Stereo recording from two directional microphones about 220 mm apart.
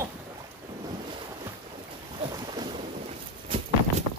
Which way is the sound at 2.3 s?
20° right (ahead or behind).